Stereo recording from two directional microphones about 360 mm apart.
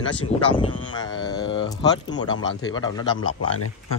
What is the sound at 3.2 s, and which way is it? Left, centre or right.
Speech, left.